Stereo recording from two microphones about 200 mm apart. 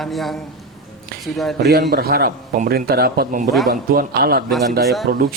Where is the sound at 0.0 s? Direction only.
Centre (ahead or behind).